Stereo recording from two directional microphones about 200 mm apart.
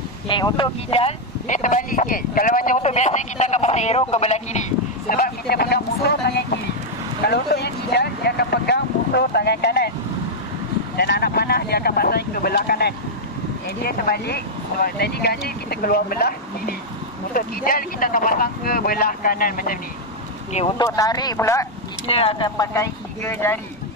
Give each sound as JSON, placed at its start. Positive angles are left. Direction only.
{"t": 0.3, "sound": "speech", "side_deg": 25}
{"t": 11.0, "sound": "speech", "side_deg": 50}
{"t": 20.5, "sound": "speech", "side_deg": 25}
{"t": 22.0, "sound": "speech", "side_deg": 30}